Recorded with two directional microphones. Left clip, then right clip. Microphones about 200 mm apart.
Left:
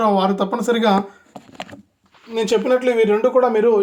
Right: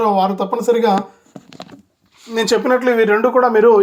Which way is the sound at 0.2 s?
15° right (ahead or behind).